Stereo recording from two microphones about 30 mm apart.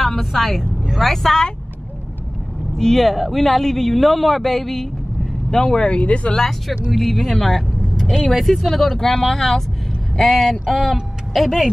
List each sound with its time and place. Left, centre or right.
0.0 s a man's voice: centre
2.7 s speech: centre
3.0 s a man's voice: centre
5.9 s speech: left
6.9 s a man's voice: centre
11.3 s speech: centre